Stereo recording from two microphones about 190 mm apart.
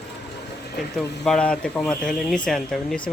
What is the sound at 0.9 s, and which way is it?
Speech, 5° left (ahead or behind).